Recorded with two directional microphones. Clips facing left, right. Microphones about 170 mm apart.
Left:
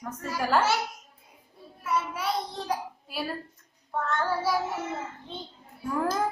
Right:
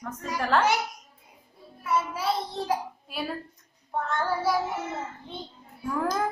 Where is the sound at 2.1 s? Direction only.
25° right (ahead or behind).